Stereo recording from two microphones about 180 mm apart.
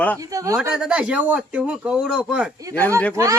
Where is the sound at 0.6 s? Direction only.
5° right (ahead or behind).